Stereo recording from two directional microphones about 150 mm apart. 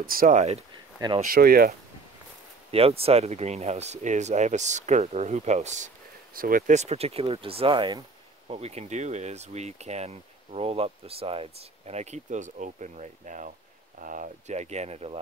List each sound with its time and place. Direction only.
0.0 s speech: 75° right (ahead or behind)
2.7 s speech: 40° right (ahead or behind)
6.3 s speech: 70° right (ahead or behind); by 8.0 s 35° right (ahead or behind)
8.5 s speech: 45° right (ahead or behind)